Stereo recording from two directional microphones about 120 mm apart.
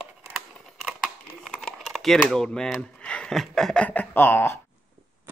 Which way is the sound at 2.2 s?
5° left (ahead or behind).